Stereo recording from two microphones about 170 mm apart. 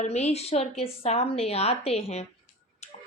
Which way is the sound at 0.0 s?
40° left (ahead or behind).